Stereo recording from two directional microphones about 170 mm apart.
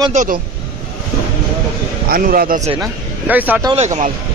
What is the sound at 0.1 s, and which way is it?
Speech, 50° right (ahead or behind).